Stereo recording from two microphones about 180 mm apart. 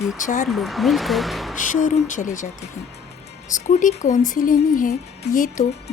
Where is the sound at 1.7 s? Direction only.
45° left (ahead or behind).